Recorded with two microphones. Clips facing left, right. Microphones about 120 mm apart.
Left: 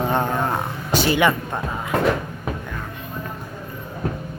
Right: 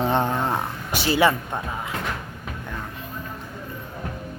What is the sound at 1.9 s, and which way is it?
Cupboard open or close, 60° left (ahead or behind).